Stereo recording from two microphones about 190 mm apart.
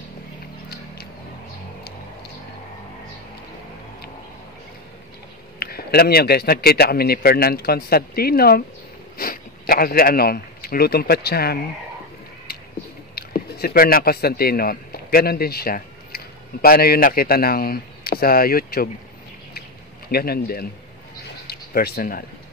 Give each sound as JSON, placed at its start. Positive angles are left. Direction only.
{"t": 5.6, "sound": "a man's voice", "side_deg": 55}
{"t": 13.1, "sound": "a man's voice", "side_deg": 55}
{"t": 20.1, "sound": "a man's voice", "side_deg": 55}